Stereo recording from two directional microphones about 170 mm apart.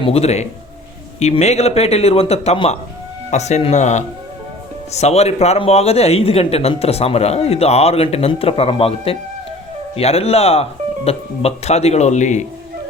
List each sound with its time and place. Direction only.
0.0 s speech: 35° left (ahead or behind)